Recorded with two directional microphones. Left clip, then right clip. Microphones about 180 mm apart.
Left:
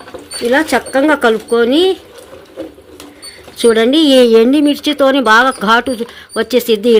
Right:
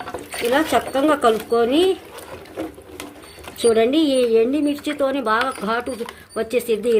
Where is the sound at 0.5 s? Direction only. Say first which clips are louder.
Left 6 dB; 30° left (ahead or behind).